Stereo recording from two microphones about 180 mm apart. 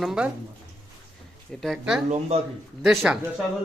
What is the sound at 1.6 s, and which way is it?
Speech, 5° right (ahead or behind).